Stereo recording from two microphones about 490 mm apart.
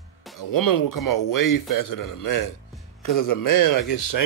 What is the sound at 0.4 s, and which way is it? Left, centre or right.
A man's voice, left.